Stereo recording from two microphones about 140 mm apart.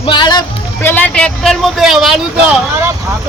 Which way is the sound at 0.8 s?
10° left (ahead or behind).